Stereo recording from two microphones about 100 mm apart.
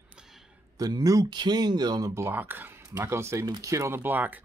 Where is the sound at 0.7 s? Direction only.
40° right (ahead or behind).